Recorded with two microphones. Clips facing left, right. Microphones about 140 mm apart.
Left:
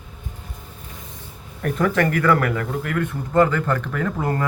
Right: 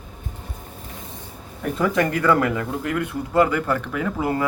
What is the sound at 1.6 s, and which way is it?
Speech, 15° right (ahead or behind).